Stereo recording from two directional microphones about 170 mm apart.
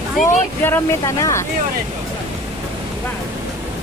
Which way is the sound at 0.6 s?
15° left (ahead or behind).